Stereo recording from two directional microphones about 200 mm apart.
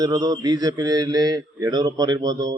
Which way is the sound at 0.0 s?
20° right (ahead or behind).